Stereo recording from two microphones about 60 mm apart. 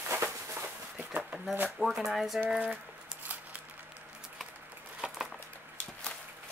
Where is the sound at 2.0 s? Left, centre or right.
Centre.